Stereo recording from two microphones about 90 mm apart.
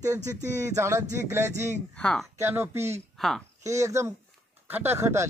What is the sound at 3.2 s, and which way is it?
Speech, centre (ahead or behind).